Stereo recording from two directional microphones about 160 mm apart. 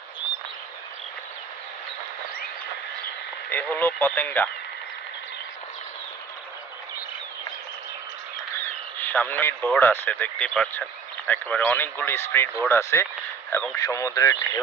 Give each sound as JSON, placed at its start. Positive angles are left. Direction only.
{"t": 3.4, "sound": "speech", "side_deg": 10}
{"t": 8.9, "sound": "speech", "side_deg": 10}